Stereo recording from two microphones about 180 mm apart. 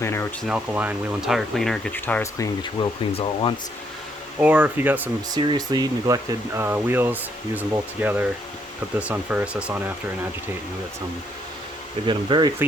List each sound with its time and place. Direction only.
0.0 s speech: 15° left (ahead or behind)
0.4 s speech: 10° right (ahead or behind); by 2.5 s 10° left (ahead or behind)
2.8 s speech: 30° left (ahead or behind)
4.4 s speech: 5° right (ahead or behind)
5.3 s speech: 25° right (ahead or behind); by 9.9 s 10° right (ahead or behind)
12.0 s speech: 25° right (ahead or behind)